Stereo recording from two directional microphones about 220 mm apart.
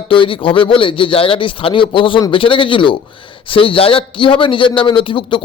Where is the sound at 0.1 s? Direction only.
25° left (ahead or behind).